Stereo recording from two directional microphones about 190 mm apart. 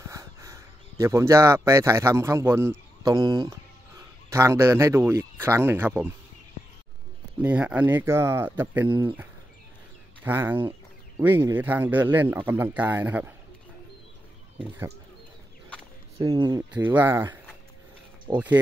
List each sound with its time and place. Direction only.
0.0 s speech: 15° right (ahead or behind)
7.4 s speech: 5° right (ahead or behind)
16.2 s speech: 20° right (ahead or behind)
16.7 s speech: 10° right (ahead or behind)